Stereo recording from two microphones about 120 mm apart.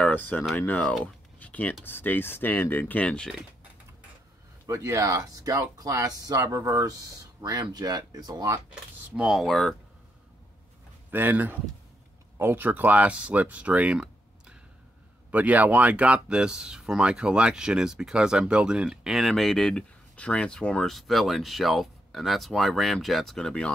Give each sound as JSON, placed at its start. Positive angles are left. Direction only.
{"t": 0.0, "sound": "speech", "side_deg": 15}
{"t": 1.0, "sound": "a sound", "side_deg": 10}
{"t": 1.9, "sound": "speech", "side_deg": 15}
{"t": 4.6, "sound": "speech", "side_deg": -25}
{"t": 9.1, "sound": "speech", "side_deg": -5}
{"t": 11.1, "sound": "speech", "side_deg": -15}
{"t": 15.3, "sound": "speech", "side_deg": -15}